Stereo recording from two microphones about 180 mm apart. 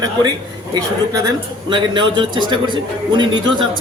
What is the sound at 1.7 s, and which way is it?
Speech, 25° right (ahead or behind).